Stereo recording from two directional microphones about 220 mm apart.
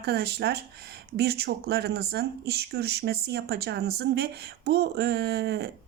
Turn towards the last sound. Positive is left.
turn(degrees=-45)  # may be behind; listen again after turning